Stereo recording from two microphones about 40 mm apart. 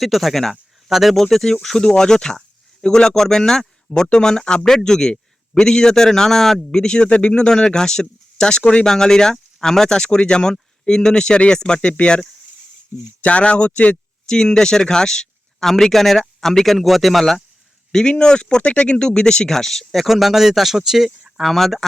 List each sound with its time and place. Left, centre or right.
0.0 s speech: centre
1.1 s speech: centre
6.7 s speech: centre
7.4 s speech: centre
13.2 s speech: left
14.3 s speech: centre
17.9 s speech: left
20.1 s speech: centre
21.3 s speech: centre